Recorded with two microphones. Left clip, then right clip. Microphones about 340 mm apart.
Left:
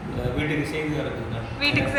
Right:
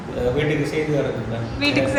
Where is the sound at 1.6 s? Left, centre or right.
Centre.